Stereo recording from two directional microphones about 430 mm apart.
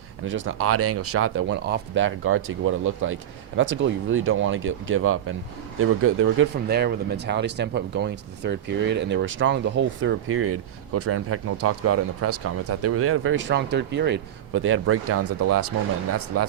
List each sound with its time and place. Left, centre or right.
0.3 s speech: right